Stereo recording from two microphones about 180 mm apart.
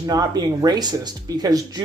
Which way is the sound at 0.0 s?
20° right (ahead or behind).